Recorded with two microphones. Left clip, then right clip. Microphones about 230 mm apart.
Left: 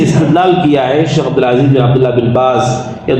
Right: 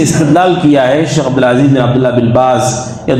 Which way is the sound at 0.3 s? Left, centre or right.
Right.